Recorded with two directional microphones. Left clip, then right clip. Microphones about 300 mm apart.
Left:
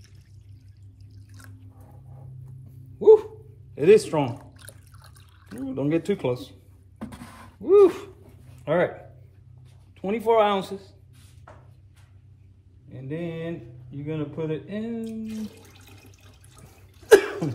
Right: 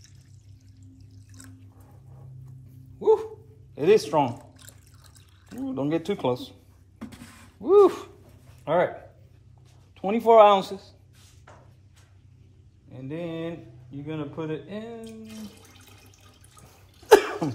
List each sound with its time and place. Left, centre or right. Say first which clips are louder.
3.0 s dog: left 6 dB; centre
3.7 s speech: left 2 dB; centre
4.6 s drip: left 3 dB; centre
5.7 s speech: left 2 dB; centre
7.0 s a sound: left 3 dB; centre
7.6 s speech: left 1 dB; centre
9.9 s speech: right 4 dB; centre
12.9 s speech: even; centre
14.0 s water: left 3 dB; centre
17.1 s sneeze: left 1 dB; centre